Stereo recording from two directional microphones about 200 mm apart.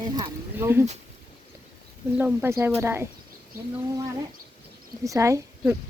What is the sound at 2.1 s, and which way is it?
Speech, 10° right (ahead or behind).